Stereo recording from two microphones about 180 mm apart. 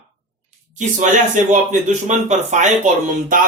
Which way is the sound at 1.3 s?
45° right (ahead or behind).